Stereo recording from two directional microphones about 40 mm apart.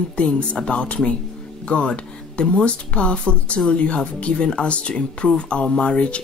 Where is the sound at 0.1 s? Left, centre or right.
Left.